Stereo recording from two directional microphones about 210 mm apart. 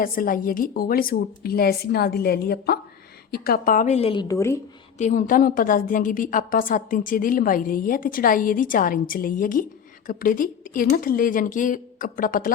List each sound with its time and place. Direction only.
0.0 s a woman's voice: 40° left (ahead or behind); by 4.5 s 15° left (ahead or behind)
4.9 s a woman's voice: 35° left (ahead or behind)